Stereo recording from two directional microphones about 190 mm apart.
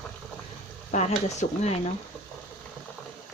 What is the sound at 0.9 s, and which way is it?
Speech, 35° left (ahead or behind).